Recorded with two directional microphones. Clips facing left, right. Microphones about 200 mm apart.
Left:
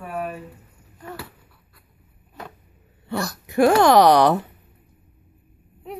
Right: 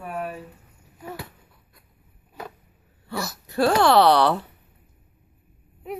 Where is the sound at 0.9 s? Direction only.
10° right (ahead or behind).